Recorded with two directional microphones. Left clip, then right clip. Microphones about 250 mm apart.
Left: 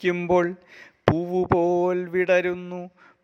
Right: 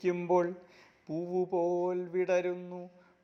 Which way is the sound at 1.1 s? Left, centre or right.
Left.